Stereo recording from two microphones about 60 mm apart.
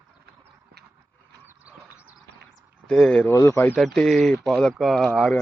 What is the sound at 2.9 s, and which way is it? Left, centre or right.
Speech, centre.